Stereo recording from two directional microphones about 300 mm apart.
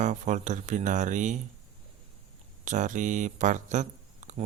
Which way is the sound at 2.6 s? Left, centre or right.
Right.